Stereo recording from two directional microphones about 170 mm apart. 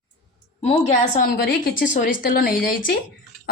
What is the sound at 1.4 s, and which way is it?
A woman's voice, 55° left (ahead or behind).